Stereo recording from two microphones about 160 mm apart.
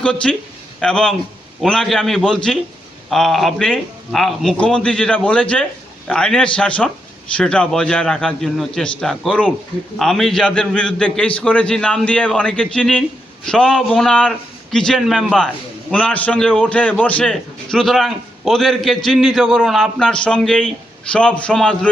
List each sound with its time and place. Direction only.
0.0 s a man's voice: 5° left (ahead or behind)